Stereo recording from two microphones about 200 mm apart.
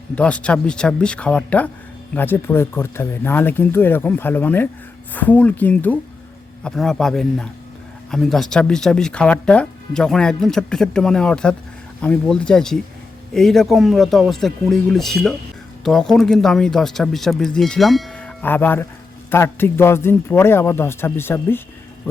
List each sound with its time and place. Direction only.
0.2 s speech: 5° left (ahead or behind)